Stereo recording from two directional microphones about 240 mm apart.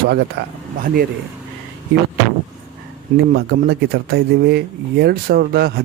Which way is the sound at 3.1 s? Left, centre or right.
Right.